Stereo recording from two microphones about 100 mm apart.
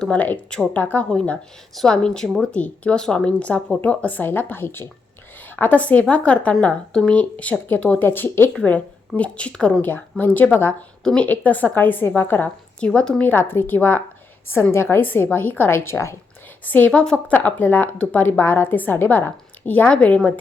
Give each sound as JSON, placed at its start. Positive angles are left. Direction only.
{"t": 0.0, "sound": "a woman's voice", "side_deg": 15}
{"t": 12.8, "sound": "a woman's voice", "side_deg": 10}
{"t": 16.6, "sound": "speech", "side_deg": 15}